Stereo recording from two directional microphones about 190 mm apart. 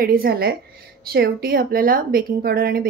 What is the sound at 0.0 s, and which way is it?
A woman's voice, 50° right (ahead or behind).